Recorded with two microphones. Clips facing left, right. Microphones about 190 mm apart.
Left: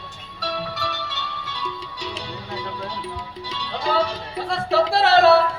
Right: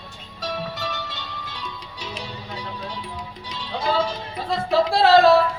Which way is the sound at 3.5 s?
70° left (ahead or behind).